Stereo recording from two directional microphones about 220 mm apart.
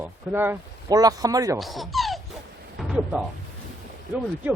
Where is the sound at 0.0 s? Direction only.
10° right (ahead or behind).